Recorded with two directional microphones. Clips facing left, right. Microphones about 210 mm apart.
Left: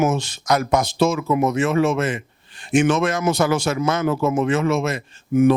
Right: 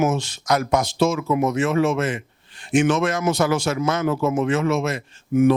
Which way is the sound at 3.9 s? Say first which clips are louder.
Left 1 dB; 25° left (ahead or behind).